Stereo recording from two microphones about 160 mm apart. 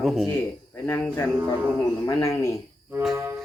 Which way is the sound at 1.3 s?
10° right (ahead or behind).